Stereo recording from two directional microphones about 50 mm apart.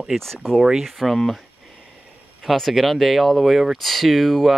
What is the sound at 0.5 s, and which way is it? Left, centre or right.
Speech, centre.